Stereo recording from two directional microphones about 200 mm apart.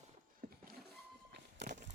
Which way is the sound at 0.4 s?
45° right (ahead or behind).